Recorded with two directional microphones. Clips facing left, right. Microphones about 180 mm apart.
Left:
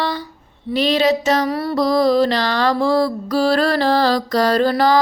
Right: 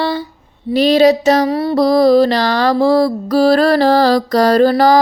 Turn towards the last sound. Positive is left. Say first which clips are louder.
# right 5 dB
turn(degrees=-40)  # may be behind; listen again after turning